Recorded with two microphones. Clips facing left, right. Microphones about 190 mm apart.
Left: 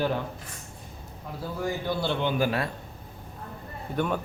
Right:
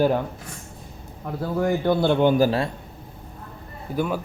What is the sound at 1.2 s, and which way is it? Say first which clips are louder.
A man's voice: right 8 dB; 60° right (ahead or behind).